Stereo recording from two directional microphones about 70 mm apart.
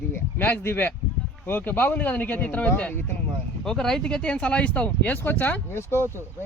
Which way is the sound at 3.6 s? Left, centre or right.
Centre.